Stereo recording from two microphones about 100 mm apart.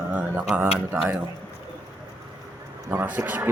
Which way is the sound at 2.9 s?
20° right (ahead or behind).